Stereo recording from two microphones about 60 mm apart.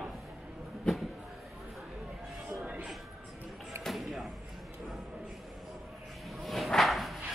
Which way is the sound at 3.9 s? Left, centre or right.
Centre.